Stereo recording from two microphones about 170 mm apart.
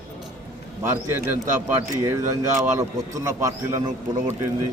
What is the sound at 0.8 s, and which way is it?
A man's voice, 15° right (ahead or behind).